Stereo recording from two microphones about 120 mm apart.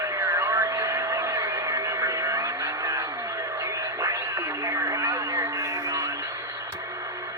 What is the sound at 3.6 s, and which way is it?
Radio, 25° right (ahead or behind).